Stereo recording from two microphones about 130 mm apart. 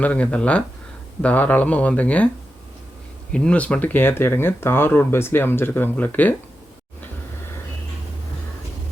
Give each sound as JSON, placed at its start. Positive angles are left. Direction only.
{"t": 0.0, "sound": "speech", "side_deg": 10}
{"t": 3.3, "sound": "speech", "side_deg": 10}